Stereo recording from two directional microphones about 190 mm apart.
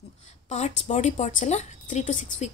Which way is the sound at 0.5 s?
35° left (ahead or behind).